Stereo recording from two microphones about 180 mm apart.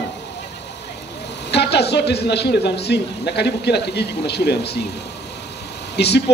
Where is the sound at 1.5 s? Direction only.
65° left (ahead or behind).